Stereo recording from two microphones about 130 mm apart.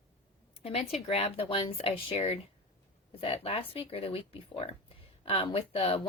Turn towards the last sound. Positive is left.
turn(degrees=45)  # may be behind; listen again after turning